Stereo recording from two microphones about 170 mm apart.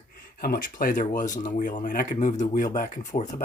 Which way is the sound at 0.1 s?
60° left (ahead or behind).